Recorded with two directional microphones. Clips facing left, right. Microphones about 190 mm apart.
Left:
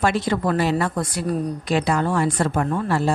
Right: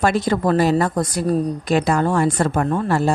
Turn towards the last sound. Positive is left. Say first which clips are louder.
# right 3 dB
turn(degrees=-45)  # may be behind; listen again after turning